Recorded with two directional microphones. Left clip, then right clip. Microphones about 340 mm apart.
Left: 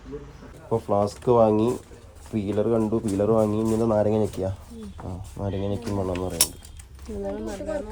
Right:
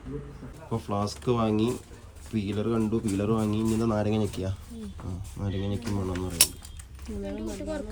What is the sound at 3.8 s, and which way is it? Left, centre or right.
Speech, centre.